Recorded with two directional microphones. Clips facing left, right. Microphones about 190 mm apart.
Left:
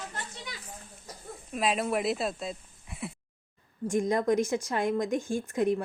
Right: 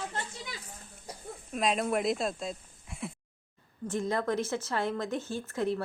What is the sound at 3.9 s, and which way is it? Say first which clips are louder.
A woman's voice: left 5 dB; 15° left (ahead or behind).